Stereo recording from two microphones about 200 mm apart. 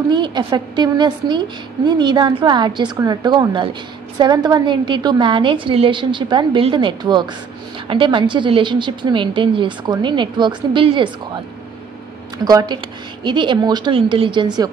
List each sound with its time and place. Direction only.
0.1 s a woman's voice: 25° right (ahead or behind)
12.4 s a woman's voice: 20° right (ahead or behind)